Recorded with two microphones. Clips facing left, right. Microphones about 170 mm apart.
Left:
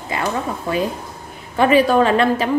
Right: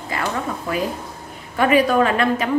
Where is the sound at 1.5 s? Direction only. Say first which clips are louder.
Left 2 dB; 30° left (ahead or behind).